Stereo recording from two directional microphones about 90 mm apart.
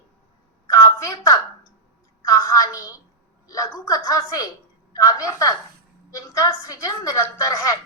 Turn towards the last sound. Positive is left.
turn(degrees=40)  # may be behind; listen again after turning